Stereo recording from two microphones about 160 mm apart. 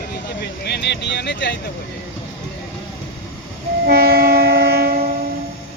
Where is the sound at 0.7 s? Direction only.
90° left.